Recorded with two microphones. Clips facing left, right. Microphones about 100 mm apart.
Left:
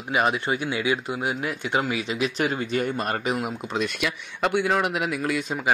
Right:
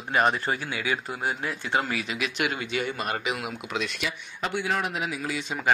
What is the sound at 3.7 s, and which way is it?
Speech, 55° left (ahead or behind).